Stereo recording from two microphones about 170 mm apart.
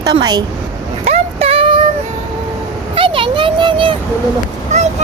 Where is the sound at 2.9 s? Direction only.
30° right (ahead or behind).